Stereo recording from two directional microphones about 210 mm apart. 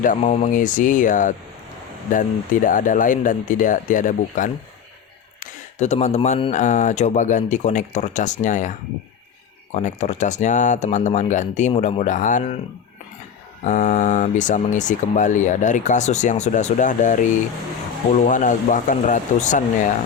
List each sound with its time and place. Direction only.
0.0 s speech: 35° left (ahead or behind)
9.7 s speech: 35° left (ahead or behind)
13.7 s speech: 35° left (ahead or behind)